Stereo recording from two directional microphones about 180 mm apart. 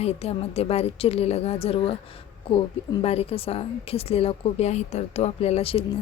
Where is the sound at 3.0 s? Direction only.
35° left (ahead or behind).